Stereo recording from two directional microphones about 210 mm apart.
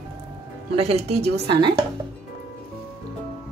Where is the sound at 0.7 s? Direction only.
30° right (ahead or behind).